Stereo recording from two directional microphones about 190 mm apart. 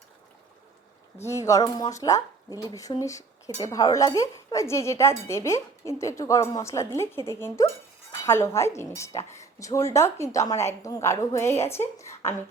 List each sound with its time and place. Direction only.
1.2 s speech: 15° left (ahead or behind)